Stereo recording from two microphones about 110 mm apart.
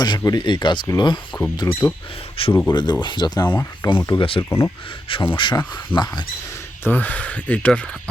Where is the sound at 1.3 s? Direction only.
35° left (ahead or behind).